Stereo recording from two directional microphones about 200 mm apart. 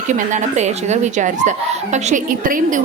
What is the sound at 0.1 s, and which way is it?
Speech, 35° right (ahead or behind).